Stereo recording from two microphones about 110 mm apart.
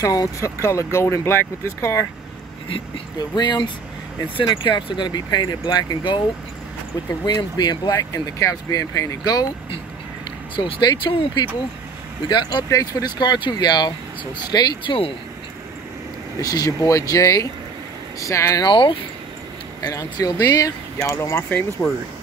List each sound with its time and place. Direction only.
0.0 s speech: 30° left (ahead or behind)
3.2 s speech: 40° left (ahead or behind)
7.2 s speech: 40° left (ahead or behind)
10.5 s speech: 50° left (ahead or behind)
16.3 s speech: 35° left (ahead or behind)
18.7 s speech: 50° left (ahead or behind)
19.8 s speech: 35° left (ahead or behind)
21.5 s speech: 15° left (ahead or behind)